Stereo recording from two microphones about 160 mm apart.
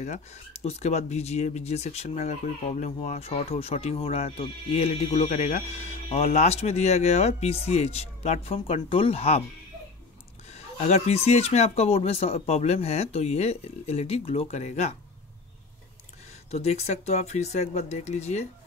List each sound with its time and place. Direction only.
0.0 s speech: 45° left (ahead or behind)
10.5 s speech: 45° left (ahead or behind)
16.4 s speech: 40° left (ahead or behind)